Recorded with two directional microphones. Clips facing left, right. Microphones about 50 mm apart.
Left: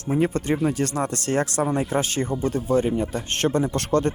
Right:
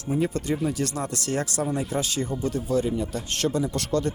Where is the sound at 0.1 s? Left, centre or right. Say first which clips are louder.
Left 3 dB; left.